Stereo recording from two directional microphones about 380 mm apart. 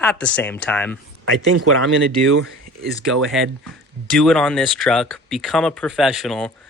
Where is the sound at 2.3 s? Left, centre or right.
Right.